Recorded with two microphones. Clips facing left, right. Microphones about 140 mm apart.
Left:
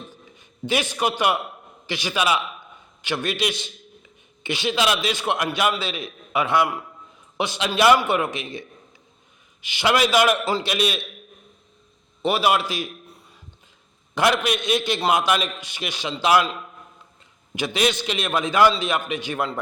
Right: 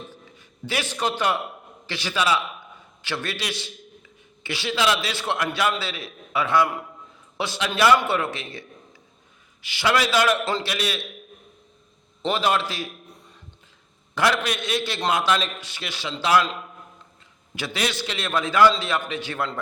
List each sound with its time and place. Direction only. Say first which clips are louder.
0.1 s a sound: right 1 dB; 20° left (ahead or behind)
1.9 s a man's voice: left 1 dB; 15° left (ahead or behind)
12.2 s a man's voice: left 2 dB; 10° left (ahead or behind)
14.2 s a man's voice: left 2 dB; 20° left (ahead or behind)
17.5 s a man's voice: left 5 dB; 20° left (ahead or behind)